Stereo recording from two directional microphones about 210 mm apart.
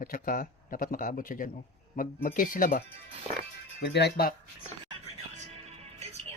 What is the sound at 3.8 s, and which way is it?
Speech, 55° left (ahead or behind).